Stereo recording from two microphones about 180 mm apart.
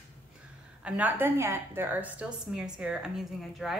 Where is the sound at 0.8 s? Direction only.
10° right (ahead or behind).